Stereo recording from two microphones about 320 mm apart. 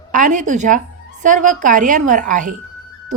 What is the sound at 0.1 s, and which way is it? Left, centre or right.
Speech, right.